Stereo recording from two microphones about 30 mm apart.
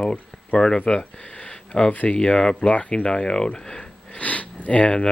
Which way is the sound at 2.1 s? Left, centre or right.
Left.